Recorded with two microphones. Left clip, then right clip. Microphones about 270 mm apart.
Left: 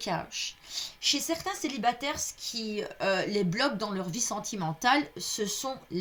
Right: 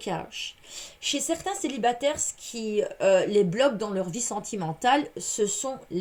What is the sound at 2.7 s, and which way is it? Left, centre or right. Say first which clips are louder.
Speech: right 8 dB; centre.